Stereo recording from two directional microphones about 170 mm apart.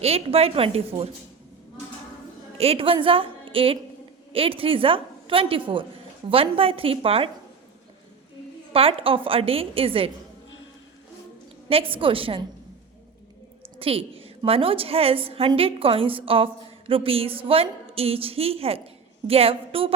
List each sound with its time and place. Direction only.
0.0 s a woman's voice: 35° right (ahead or behind)
2.6 s a woman's voice: 35° right (ahead or behind)
8.7 s a woman's voice: 35° right (ahead or behind)
11.7 s a woman's voice: 30° right (ahead or behind)
13.7 s a woman's voice: 35° right (ahead or behind)